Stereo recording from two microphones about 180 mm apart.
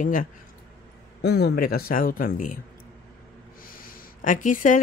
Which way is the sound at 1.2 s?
65° left (ahead or behind).